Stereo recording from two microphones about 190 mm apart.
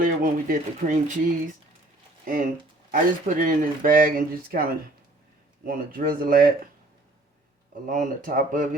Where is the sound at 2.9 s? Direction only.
45° right (ahead or behind).